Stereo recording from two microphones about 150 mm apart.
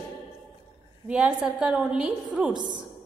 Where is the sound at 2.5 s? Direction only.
30° right (ahead or behind).